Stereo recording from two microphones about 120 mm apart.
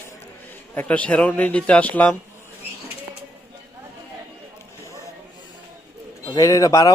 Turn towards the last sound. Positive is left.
turn(degrees=30)  # may be behind; listen again after turning